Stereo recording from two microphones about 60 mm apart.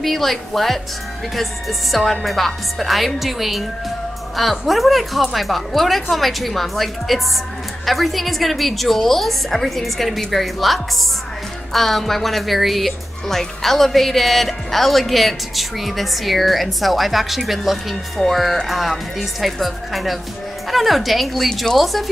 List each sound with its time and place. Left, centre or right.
0.0 s speech: centre